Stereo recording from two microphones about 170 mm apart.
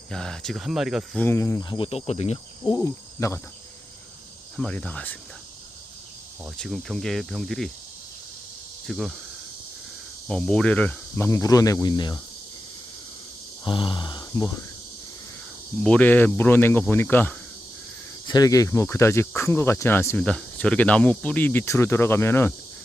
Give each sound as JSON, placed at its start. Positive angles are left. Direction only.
{"t": 0.1, "sound": "speech", "side_deg": 5}
{"t": 1.2, "sound": "speech", "side_deg": 15}
{"t": 2.6, "sound": "speech", "side_deg": 20}
{"t": 4.5, "sound": "speech", "side_deg": 5}
{"t": 6.6, "sound": "speech", "side_deg": 0}
{"t": 8.9, "sound": "speech", "side_deg": 0}
{"t": 10.2, "sound": "speech", "side_deg": 5}
{"t": 13.7, "sound": "speech", "side_deg": 30}
{"t": 15.8, "sound": "speech", "side_deg": 5}